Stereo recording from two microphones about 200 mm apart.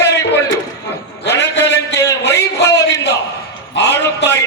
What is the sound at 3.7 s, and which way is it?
Speech, 60° left (ahead or behind).